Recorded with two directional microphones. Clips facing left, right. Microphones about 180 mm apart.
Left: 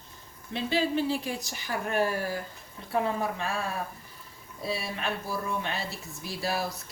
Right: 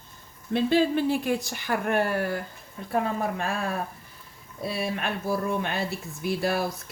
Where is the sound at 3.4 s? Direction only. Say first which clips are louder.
Right 3 dB; 55° right (ahead or behind).